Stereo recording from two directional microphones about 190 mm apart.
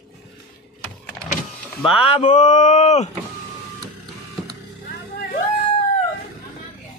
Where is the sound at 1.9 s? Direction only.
30° left (ahead or behind).